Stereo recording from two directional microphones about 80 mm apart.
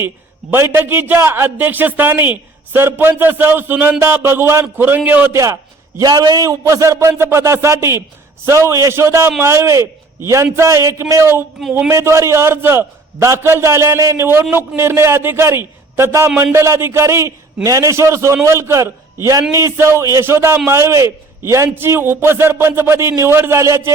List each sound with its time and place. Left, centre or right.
0.5 s a man's voice: right
5.3 s a man's voice: right
6.0 s a man's voice: right